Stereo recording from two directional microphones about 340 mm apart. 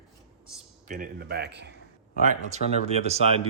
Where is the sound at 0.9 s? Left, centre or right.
Right.